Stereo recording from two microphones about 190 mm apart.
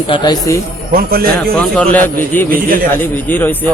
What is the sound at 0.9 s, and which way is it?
Speech, 50° right (ahead or behind).